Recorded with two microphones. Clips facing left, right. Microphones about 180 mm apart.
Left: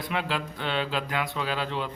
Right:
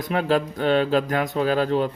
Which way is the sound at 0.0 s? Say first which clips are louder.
Right 9 dB; 45° right (ahead or behind).